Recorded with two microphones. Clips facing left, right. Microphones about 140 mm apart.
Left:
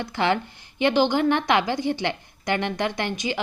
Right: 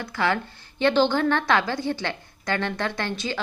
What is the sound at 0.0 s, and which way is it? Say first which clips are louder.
A woman's voice: left 2 dB; 20° left (ahead or behind).